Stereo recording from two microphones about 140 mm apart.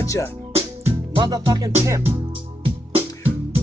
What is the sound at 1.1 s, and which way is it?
Music, 30° right (ahead or behind).